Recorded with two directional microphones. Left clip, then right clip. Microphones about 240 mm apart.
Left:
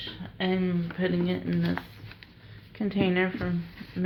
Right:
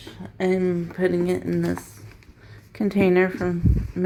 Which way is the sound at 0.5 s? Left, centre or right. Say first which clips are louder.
Right 7 dB; right.